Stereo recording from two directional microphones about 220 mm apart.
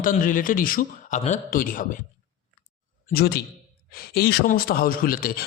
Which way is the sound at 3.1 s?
45° left (ahead or behind).